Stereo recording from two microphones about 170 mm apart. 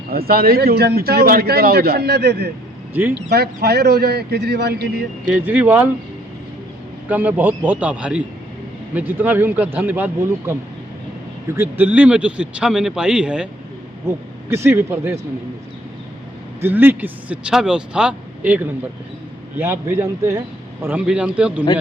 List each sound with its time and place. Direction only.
0.1 s speech: 65° right (ahead or behind)
2.9 s speech: 10° right (ahead or behind)
3.2 s a man's voice: 70° right (ahead or behind)
5.3 s speech: 10° right (ahead or behind)
7.1 s speech: 10° right (ahead or behind)
14.5 s speech: 15° right (ahead or behind)
16.6 s speech: 10° right (ahead or behind)